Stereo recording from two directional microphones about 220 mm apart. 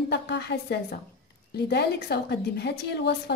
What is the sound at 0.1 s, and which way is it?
A woman's voice, 50° left (ahead or behind).